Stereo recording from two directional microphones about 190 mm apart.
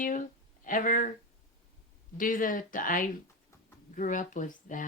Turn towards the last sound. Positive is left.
turn(degrees=40)  # may be behind; listen again after turning